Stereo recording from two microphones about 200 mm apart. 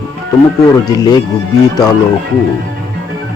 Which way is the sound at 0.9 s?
20° left (ahead or behind).